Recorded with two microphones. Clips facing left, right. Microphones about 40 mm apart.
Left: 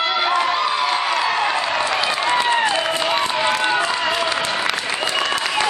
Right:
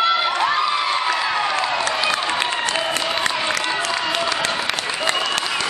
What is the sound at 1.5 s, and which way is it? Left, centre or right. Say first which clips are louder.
Applause: left 1 dB; left.